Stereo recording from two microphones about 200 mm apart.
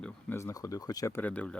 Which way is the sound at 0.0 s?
10° left (ahead or behind).